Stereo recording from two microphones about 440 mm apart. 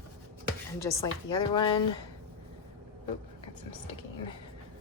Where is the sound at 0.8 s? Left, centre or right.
Centre.